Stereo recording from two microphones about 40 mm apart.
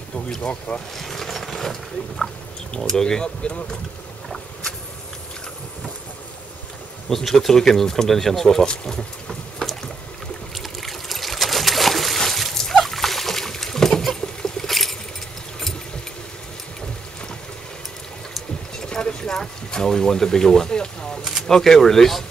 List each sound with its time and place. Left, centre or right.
0.5 s speech: left
0.9 s speech: centre
7.1 s speech: centre
8.6 s boat: centre
10.5 s trickle: centre
12.2 s splash: centre
14.2 s boat: centre
14.7 s a sound: centre
18.9 s clip-clop: centre
19.7 s speech: centre